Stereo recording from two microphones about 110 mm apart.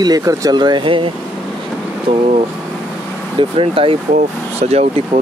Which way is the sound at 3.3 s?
55° right (ahead or behind).